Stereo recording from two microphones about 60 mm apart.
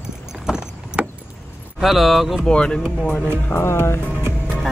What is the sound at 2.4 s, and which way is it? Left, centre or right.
Speech, centre.